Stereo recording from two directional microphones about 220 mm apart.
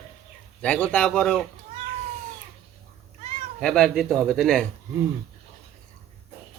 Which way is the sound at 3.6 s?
5° left (ahead or behind).